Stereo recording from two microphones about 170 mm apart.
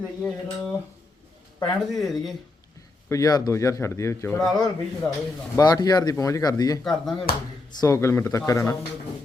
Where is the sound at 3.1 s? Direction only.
20° left (ahead or behind).